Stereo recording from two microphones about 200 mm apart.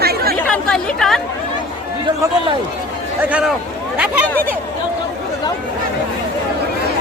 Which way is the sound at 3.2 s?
5° right (ahead or behind).